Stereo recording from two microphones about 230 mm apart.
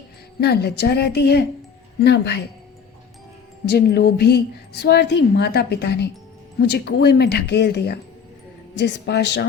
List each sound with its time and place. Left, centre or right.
0.3 s a woman's voice: left
3.7 s a woman's voice: left